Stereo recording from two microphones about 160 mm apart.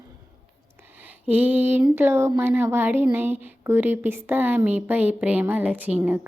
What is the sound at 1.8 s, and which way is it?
Speech, 15° right (ahead or behind).